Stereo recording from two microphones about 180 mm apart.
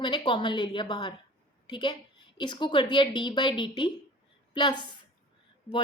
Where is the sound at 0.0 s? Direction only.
25° left (ahead or behind).